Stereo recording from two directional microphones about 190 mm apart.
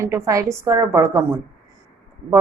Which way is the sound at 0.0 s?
15° right (ahead or behind).